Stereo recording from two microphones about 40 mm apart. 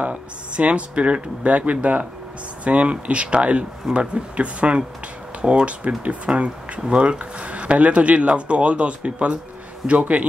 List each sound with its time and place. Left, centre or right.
0.0 s speech: right